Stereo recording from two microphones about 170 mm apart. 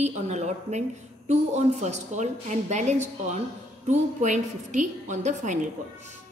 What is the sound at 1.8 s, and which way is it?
A woman's voice, 40° right (ahead or behind).